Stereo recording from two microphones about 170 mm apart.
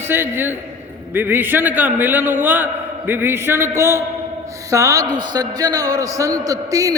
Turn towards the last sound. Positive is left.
turn(degrees=-20)  # may be behind; listen again after turning